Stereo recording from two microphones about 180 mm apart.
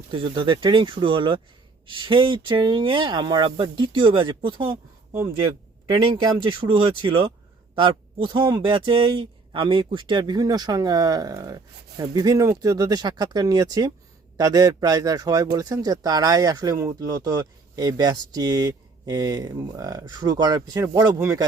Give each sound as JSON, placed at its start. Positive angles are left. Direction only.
{"t": 0.1, "sound": "speech", "side_deg": -25}